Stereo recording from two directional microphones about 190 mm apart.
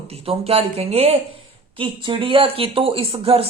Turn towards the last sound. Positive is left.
turn(degrees=-30)  # may be behind; listen again after turning